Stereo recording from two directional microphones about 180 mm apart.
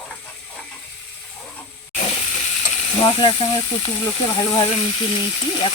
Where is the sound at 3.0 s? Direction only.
25° left (ahead or behind).